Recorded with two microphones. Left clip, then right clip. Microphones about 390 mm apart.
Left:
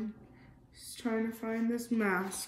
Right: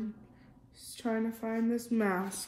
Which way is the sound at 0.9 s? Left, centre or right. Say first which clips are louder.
Right 1 dB; centre.